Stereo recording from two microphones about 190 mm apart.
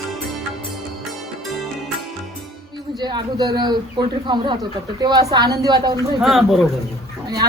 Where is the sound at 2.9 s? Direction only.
25° right (ahead or behind).